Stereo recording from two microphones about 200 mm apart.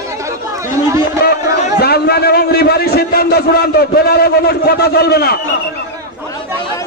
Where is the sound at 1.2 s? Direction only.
55° left (ahead or behind).